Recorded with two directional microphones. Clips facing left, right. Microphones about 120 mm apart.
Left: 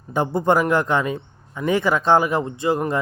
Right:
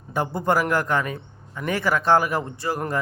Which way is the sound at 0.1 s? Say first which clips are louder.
Left 4 dB; 20° left (ahead or behind).